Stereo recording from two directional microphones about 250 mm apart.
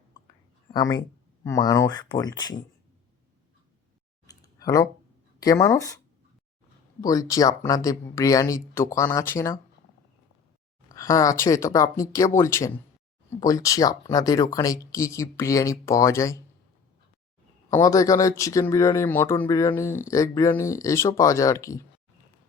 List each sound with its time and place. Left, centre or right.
0.7 s speech: centre
4.3 s a sound: centre
5.4 s speech: centre
7.0 s speech: centre
10.8 s speech: centre
17.7 s speech: centre